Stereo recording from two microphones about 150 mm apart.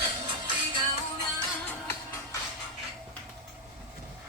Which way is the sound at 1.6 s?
15° left (ahead or behind).